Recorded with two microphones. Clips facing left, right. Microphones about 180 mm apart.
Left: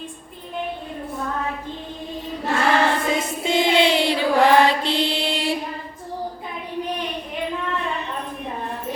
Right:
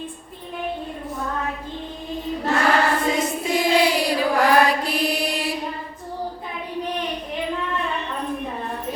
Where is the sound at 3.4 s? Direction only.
25° left (ahead or behind).